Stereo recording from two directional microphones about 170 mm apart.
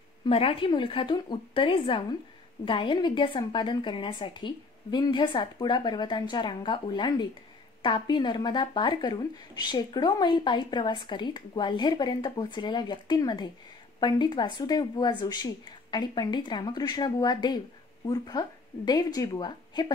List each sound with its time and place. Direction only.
0.2 s a woman's voice: 35° left (ahead or behind)